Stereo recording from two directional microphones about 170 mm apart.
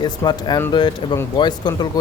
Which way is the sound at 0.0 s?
25° left (ahead or behind).